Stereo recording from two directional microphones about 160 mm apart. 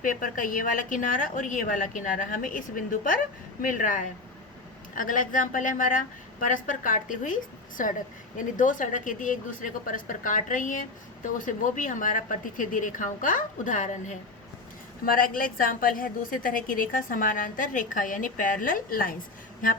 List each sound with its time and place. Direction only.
0.0 s a woman's voice: 55° left (ahead or behind)
15.0 s a woman's voice: 60° left (ahead or behind)